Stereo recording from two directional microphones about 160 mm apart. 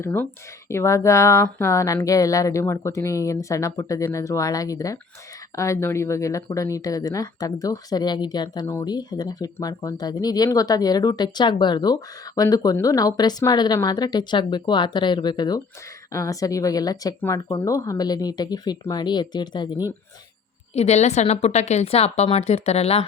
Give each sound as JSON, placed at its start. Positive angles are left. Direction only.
{"t": 0.0, "sound": "speech", "side_deg": 15}
{"t": 20.7, "sound": "a woman's voice", "side_deg": 45}